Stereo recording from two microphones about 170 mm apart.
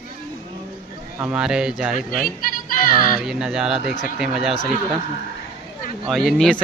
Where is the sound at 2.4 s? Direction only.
55° left (ahead or behind).